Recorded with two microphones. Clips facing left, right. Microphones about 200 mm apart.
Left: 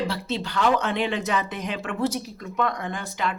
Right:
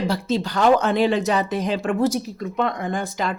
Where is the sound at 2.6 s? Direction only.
25° right (ahead or behind).